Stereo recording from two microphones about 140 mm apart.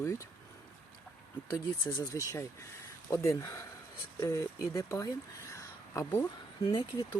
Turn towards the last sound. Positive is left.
turn(degrees=30)  # may be behind; listen again after turning